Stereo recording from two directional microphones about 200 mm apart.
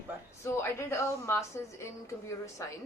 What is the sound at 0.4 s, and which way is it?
Speech, 15° left (ahead or behind).